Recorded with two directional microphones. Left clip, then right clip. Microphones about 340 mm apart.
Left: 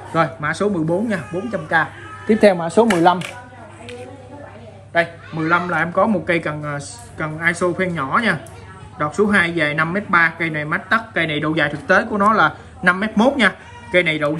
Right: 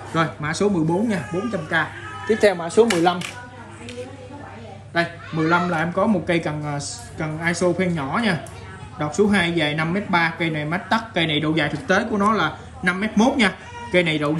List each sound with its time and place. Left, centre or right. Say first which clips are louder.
0.1 s speech: left 4 dB; centre
2.4 s speech: left 3 dB; centre
4.9 s speech: left 4 dB; centre